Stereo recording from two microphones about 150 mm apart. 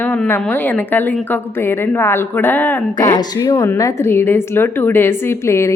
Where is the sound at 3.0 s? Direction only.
25° left (ahead or behind).